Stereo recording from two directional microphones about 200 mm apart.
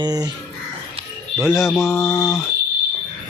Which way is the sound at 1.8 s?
15° left (ahead or behind).